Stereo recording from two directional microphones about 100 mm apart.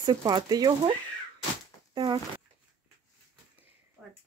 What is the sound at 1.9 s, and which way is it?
Speech, 45° right (ahead or behind).